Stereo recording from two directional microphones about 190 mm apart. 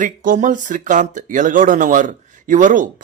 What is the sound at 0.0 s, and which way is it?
Speech, 45° right (ahead or behind).